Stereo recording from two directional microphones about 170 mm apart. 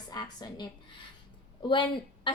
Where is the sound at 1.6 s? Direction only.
30° left (ahead or behind).